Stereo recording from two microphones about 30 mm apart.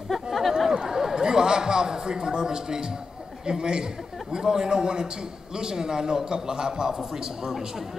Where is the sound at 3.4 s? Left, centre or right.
Right.